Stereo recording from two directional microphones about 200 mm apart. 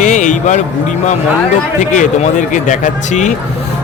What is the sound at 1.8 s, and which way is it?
Speech, 40° left (ahead or behind).